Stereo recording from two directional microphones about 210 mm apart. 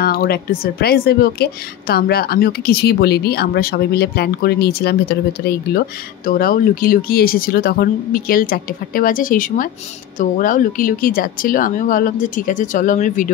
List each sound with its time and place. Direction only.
0.0 s speech: 45° left (ahead or behind)